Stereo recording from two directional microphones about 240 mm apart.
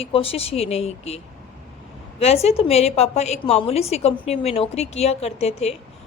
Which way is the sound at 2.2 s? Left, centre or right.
Left.